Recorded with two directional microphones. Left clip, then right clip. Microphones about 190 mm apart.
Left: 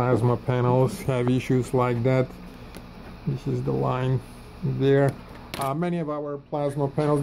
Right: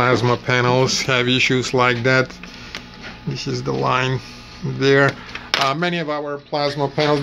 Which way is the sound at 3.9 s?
Centre (ahead or behind).